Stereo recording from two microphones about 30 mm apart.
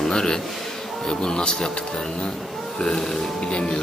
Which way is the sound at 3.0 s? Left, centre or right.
Centre.